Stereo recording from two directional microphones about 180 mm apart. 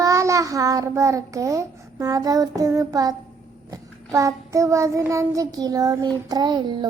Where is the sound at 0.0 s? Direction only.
15° right (ahead or behind).